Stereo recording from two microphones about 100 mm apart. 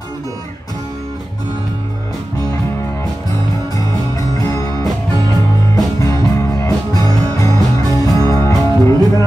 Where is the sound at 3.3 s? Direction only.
35° left (ahead or behind).